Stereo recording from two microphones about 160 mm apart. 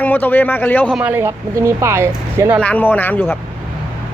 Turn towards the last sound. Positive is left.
turn(degrees=10)  # may be behind; listen again after turning